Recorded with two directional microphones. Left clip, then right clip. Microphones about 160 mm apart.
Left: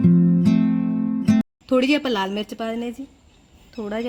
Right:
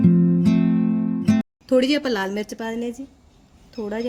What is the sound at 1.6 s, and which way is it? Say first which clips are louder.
A woman's voice: right 1 dB; 35° left (ahead or behind).